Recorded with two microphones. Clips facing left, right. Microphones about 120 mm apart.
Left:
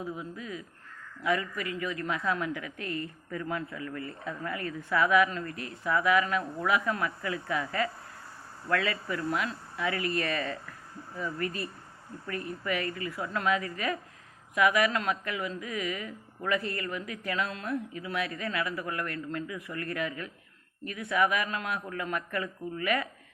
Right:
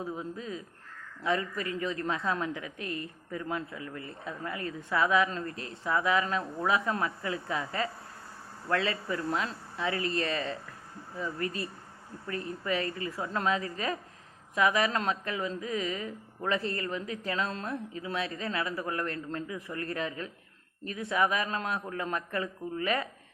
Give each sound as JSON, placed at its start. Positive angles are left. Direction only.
{"t": 0.0, "sound": "a woman's voice", "side_deg": -30}